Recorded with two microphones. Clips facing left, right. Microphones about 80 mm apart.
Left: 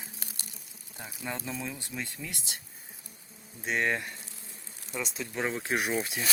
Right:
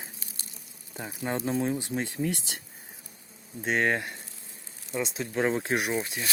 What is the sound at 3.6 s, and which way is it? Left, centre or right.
Speech, right.